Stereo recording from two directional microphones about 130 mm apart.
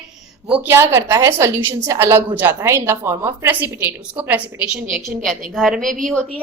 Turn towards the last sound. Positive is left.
turn(degrees=10)  # may be behind; listen again after turning